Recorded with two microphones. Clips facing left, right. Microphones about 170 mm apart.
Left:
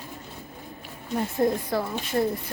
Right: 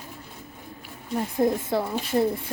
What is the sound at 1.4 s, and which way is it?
Speech, 5° right (ahead or behind).